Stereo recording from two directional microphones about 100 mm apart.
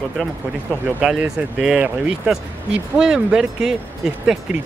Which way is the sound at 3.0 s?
10° right (ahead or behind).